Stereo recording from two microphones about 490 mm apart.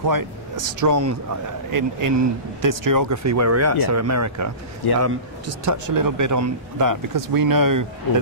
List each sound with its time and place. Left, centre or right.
0.1 s speech: right
4.8 s a man's voice: left
5.7 s speech: right